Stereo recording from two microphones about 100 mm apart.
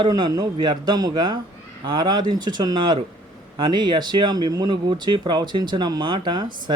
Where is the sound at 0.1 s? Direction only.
40° right (ahead or behind).